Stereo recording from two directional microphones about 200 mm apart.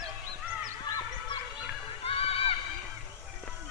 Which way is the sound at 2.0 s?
30° left (ahead or behind).